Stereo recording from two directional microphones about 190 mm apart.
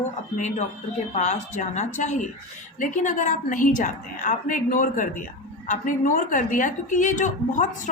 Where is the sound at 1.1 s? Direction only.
40° left (ahead or behind).